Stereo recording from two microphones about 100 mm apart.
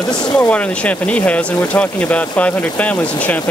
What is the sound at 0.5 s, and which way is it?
Speech, 15° left (ahead or behind).